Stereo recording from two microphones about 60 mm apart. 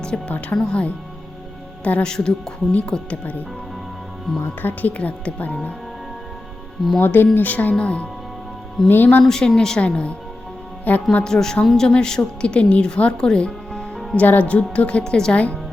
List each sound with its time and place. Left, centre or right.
0.0 s speech: centre
4.3 s speech: centre
4.8 s speech: left
7.0 s speech: left
8.9 s speech: left
9.2 s speech: centre; by 11.0 s left
11.2 s speech: centre